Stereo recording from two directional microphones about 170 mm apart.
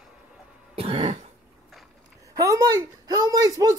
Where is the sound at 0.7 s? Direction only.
35° right (ahead or behind).